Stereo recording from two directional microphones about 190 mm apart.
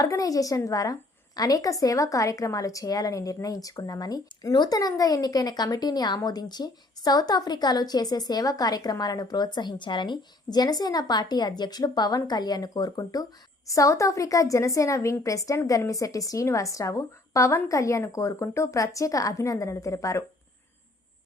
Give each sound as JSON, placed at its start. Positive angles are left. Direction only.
{"t": 0.0, "sound": "a woman's voice", "side_deg": 20}